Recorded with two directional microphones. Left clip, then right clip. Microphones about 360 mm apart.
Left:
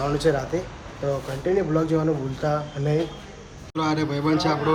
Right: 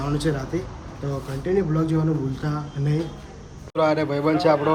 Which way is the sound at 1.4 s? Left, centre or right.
Centre.